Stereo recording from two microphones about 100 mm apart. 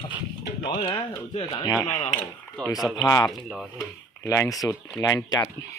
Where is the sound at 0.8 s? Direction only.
70° left (ahead or behind).